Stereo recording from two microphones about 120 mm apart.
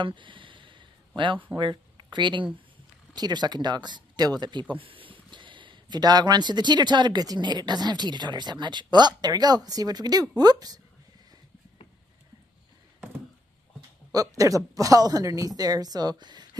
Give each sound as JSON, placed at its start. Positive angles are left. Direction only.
{"t": 0.0, "sound": "a sound", "side_deg": -45}
{"t": 1.6, "sound": "speech", "side_deg": -40}
{"t": 14.1, "sound": "speech", "side_deg": -30}